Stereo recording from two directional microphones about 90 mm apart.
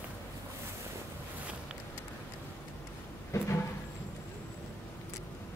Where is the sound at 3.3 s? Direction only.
30° left (ahead or behind).